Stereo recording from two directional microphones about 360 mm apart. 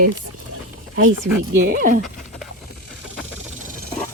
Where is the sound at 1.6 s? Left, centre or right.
Right.